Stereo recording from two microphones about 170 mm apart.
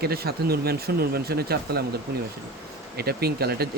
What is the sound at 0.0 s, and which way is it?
Speech, 65° right (ahead or behind).